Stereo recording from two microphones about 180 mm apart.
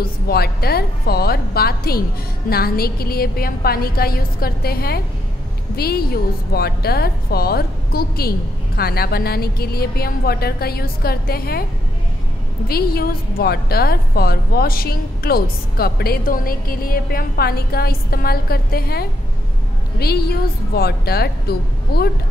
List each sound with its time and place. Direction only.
0.0 s a woman's voice: 60° left (ahead or behind)
12.6 s a woman's voice: 60° left (ahead or behind)